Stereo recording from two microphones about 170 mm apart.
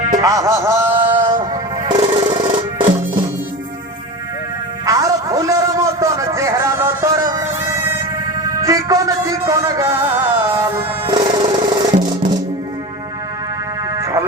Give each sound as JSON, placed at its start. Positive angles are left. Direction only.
{"t": 0.2, "sound": "music", "side_deg": -20}
{"t": 1.2, "sound": "music", "side_deg": -25}
{"t": 4.9, "sound": "a sound", "side_deg": -20}
{"t": 8.4, "sound": "a man's voice", "side_deg": -20}
{"t": 10.5, "sound": "music", "side_deg": -15}
{"t": 11.2, "sound": "music", "side_deg": -25}
{"t": 14.0, "sound": "a sound", "side_deg": -20}